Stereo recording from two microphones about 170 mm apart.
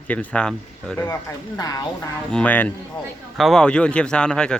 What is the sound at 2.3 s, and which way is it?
Speech, 10° left (ahead or behind).